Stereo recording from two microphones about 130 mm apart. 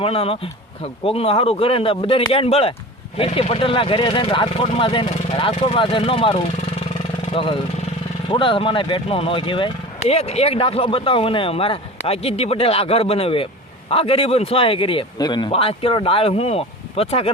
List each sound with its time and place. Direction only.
0.0 s speech: 45° left (ahead or behind)
10.0 s speech: 55° left (ahead or behind)